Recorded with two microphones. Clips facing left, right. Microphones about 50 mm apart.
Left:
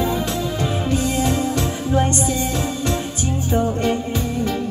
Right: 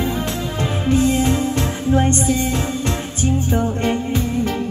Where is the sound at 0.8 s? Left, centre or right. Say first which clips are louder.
Right 6 dB; right.